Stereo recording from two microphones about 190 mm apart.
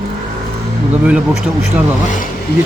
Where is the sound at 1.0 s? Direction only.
5° right (ahead or behind).